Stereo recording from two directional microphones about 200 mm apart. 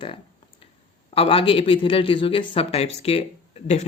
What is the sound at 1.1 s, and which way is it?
Speech, 25° left (ahead or behind).